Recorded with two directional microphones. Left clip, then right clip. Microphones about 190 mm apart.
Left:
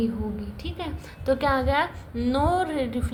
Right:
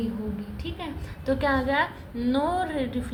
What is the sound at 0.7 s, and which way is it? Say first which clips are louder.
A woman's voice: left 2 dB; 35° left (ahead or behind).